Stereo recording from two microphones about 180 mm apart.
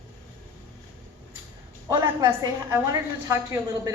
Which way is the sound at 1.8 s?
20° right (ahead or behind).